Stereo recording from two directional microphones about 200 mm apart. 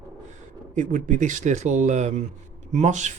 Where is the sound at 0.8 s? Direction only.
40° right (ahead or behind).